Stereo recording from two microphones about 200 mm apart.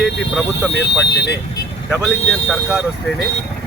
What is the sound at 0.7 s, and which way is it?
Speech, 60° left (ahead or behind).